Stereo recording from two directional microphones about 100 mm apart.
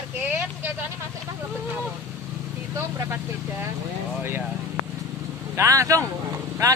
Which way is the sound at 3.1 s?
25° right (ahead or behind).